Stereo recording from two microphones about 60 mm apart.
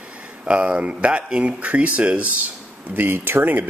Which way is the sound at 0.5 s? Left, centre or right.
Centre.